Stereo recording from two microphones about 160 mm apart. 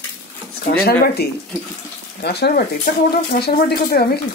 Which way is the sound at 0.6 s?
80° left.